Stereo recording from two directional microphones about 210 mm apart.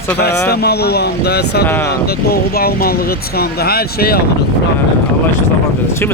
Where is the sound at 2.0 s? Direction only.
45° left (ahead or behind).